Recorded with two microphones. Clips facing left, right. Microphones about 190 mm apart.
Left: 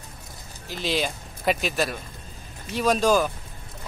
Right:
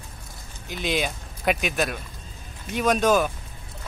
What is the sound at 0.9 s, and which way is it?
Speech, centre (ahead or behind).